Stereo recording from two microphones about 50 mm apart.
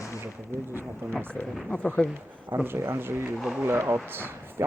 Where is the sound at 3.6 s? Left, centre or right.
Right.